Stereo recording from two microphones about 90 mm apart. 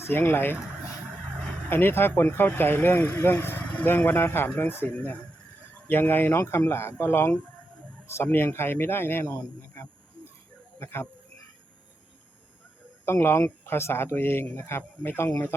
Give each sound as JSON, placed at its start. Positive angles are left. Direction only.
{"t": 0.0, "sound": "speech", "side_deg": 25}
{"t": 1.7, "sound": "speech", "side_deg": 25}
{"t": 13.1, "sound": "speech", "side_deg": 25}